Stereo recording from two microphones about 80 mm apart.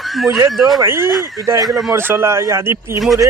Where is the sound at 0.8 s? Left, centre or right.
Right.